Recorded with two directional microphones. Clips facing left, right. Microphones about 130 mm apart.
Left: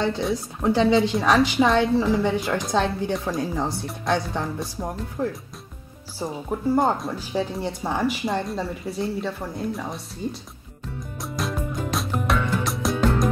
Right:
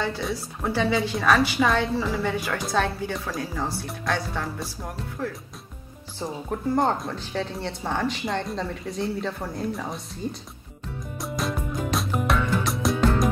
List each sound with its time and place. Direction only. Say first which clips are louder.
0.6 s a woman's voice: left 5 dB; 20° left (ahead or behind)
6.1 s speech: left 2 dB; 10° left (ahead or behind)
11.2 s music: even; centre (ahead or behind)